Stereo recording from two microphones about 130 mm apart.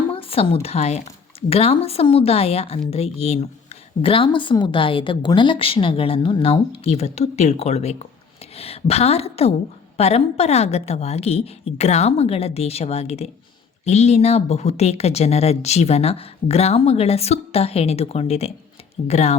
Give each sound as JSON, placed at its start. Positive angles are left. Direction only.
{"t": 0.1, "sound": "speech", "side_deg": 45}